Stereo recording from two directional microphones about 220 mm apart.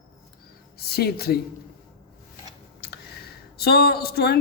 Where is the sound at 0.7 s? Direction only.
45° left (ahead or behind).